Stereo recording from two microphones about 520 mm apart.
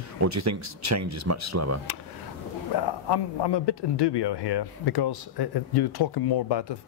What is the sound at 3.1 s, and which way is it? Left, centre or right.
Speech, left.